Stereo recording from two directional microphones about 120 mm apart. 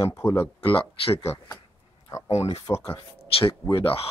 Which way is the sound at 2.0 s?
25° left (ahead or behind).